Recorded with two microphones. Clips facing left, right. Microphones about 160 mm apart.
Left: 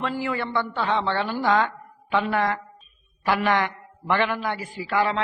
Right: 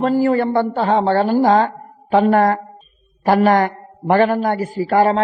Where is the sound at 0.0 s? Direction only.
40° right (ahead or behind).